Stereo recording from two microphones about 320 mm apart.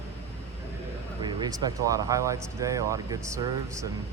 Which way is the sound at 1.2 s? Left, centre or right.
Centre.